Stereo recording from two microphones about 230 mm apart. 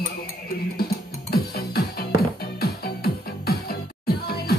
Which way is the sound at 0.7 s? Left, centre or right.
Left.